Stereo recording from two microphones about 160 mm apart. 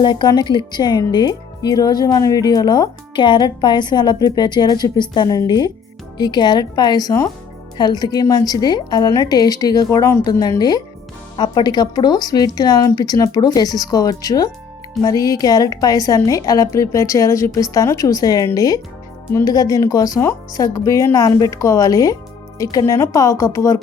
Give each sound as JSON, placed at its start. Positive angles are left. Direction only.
{"t": 0.0, "sound": "speech", "side_deg": 30}